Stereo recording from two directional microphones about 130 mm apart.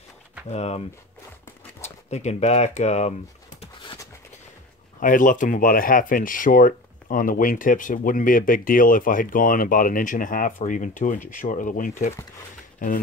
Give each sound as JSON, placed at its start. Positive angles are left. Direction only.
{"t": 0.5, "sound": "speech", "side_deg": 55}
{"t": 5.0, "sound": "speech", "side_deg": 90}